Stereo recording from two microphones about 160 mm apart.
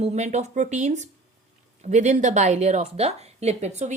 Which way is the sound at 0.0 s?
45° right (ahead or behind).